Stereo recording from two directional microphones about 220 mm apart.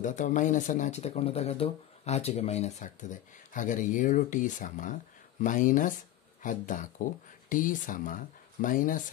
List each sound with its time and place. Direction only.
0.0 s speech: 35° left (ahead or behind)